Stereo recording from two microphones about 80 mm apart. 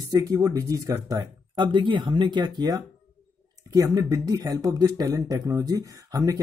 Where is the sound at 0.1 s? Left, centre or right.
Right.